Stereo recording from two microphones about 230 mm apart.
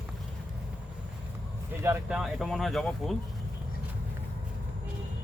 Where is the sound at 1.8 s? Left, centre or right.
Centre.